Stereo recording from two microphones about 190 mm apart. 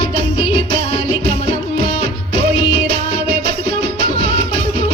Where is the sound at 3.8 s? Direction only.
55° right (ahead or behind).